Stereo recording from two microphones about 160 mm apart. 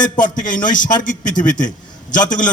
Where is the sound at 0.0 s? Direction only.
55° left (ahead or behind).